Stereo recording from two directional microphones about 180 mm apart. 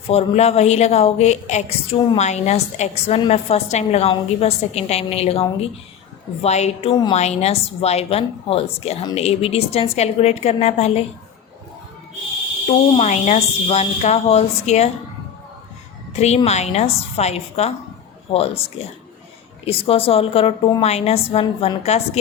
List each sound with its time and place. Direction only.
0.1 s a woman's voice: 35° left (ahead or behind)
12.9 s a woman's voice: 40° left (ahead or behind)
16.1 s a woman's voice: 35° left (ahead or behind)